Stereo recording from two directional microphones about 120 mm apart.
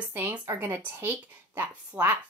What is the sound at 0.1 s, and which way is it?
A woman's voice, 15° right (ahead or behind).